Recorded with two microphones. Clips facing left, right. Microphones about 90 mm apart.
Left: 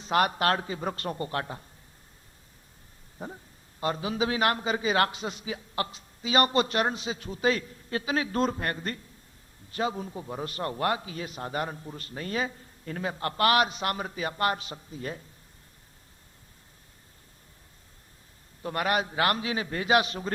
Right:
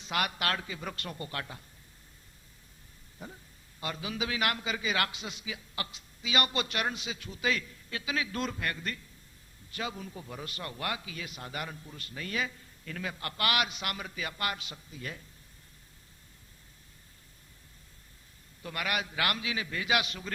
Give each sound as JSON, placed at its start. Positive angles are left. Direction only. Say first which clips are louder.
{"t": 0.0, "sound": "a man's voice", "louder": "left 8 dB", "side_deg": 35}
{"t": 3.2, "sound": "a man's voice", "louder": "left 7 dB", "side_deg": 40}
{"t": 18.6, "sound": "a man's voice", "louder": "left 7 dB", "side_deg": 35}